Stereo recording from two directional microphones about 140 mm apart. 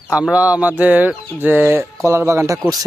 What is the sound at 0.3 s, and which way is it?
Speech, 10° right (ahead or behind).